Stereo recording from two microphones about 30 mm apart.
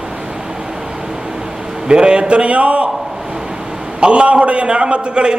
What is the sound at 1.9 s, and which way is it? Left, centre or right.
Speech, right.